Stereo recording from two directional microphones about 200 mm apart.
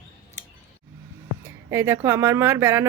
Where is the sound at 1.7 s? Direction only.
10° right (ahead or behind).